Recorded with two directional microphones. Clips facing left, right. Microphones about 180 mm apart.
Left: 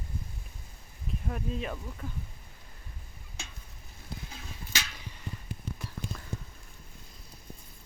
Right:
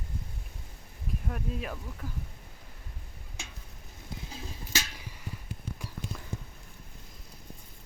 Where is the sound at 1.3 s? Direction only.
5° right (ahead or behind).